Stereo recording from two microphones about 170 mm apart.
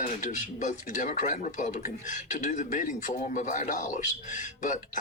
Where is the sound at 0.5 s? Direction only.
50° left (ahead or behind).